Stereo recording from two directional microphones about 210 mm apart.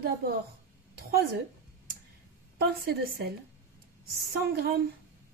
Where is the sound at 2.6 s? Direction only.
45° right (ahead or behind).